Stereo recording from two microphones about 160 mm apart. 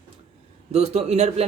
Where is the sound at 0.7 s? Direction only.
45° right (ahead or behind).